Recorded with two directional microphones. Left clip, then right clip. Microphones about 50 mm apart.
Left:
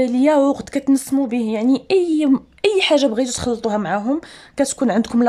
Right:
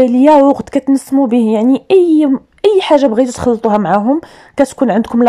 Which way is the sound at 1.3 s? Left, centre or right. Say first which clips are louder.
Right 9 dB; right.